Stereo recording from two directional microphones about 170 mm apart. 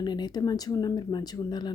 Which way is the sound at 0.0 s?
25° left (ahead or behind).